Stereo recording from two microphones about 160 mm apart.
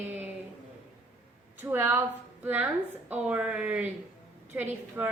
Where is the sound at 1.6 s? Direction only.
10° right (ahead or behind).